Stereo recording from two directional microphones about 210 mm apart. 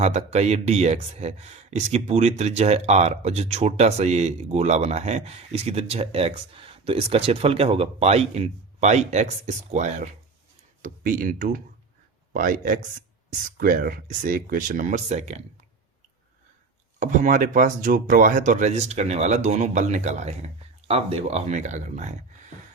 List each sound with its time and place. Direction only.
0.0 s speech: 30° right (ahead or behind)
17.0 s speech: 35° right (ahead or behind)